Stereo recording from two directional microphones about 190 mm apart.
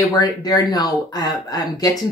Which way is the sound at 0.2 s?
20° left (ahead or behind).